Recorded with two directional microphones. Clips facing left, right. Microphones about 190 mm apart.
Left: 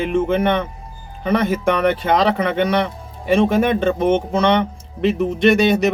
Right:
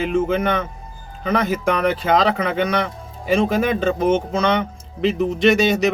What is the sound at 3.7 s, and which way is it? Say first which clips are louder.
Speech: left 1 dB; 55° left (ahead or behind).